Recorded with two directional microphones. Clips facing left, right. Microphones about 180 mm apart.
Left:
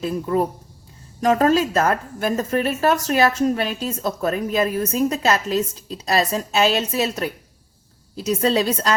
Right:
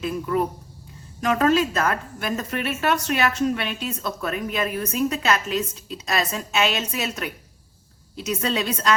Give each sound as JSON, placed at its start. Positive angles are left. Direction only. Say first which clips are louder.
{"t": 0.0, "sound": "a woman's voice", "louder": "left 3 dB", "side_deg": 35}